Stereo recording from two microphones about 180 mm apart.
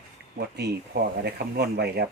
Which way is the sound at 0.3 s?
65° right (ahead or behind).